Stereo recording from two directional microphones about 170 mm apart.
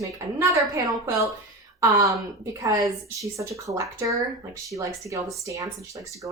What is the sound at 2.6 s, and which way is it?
A woman's voice, 20° right (ahead or behind).